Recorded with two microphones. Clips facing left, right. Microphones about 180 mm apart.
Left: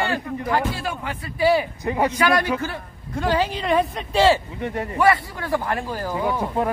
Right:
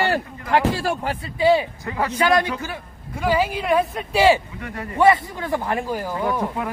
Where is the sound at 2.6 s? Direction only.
10° right (ahead or behind).